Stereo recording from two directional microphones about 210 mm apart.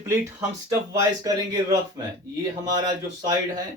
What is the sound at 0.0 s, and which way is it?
Speech, 15° right (ahead or behind).